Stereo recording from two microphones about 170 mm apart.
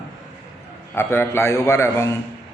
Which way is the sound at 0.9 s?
15° left (ahead or behind).